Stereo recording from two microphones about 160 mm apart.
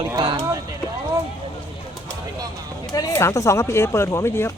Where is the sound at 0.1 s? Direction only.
20° right (ahead or behind).